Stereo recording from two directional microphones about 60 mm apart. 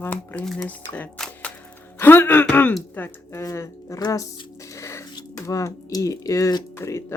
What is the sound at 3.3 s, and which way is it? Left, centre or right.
Speech, left.